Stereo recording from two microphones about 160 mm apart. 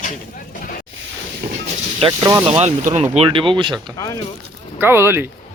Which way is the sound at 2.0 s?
25° right (ahead or behind).